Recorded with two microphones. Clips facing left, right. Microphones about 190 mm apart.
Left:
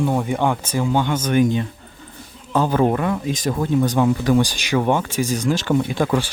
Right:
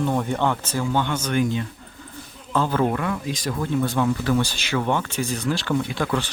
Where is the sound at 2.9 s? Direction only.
25° left (ahead or behind).